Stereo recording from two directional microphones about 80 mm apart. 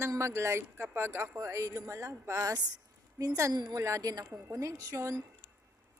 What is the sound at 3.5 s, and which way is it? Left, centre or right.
Speech, right.